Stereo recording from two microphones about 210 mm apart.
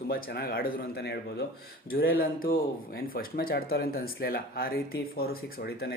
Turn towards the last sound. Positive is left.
turn(degrees=50)  # may be behind; listen again after turning